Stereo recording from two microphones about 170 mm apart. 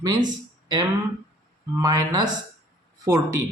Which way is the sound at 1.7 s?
20° right (ahead or behind).